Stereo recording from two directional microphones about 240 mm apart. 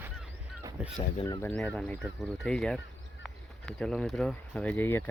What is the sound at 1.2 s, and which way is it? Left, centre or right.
Speech, centre.